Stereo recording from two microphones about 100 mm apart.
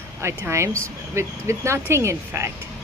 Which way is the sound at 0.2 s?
30° right (ahead or behind).